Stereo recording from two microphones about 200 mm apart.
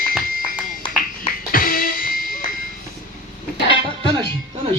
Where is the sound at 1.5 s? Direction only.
45° left (ahead or behind).